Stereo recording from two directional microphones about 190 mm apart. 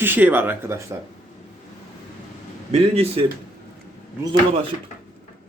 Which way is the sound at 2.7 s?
30° right (ahead or behind).